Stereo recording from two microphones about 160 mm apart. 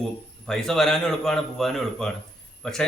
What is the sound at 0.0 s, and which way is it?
Speech, centre (ahead or behind).